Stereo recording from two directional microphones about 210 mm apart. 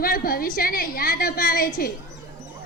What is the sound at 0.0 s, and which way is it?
A woman's voice, 45° left (ahead or behind).